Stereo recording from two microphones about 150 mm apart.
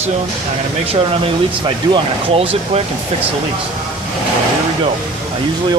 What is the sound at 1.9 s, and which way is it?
Speech, 40° right (ahead or behind).